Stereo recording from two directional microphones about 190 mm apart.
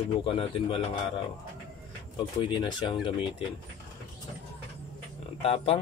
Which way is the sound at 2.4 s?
25° left (ahead or behind).